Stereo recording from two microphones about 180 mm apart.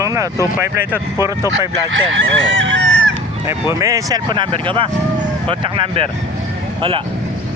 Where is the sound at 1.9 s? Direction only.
85° right.